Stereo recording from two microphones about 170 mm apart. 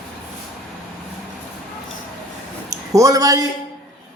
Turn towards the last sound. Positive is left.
turn(degrees=-20)  # may be behind; listen again after turning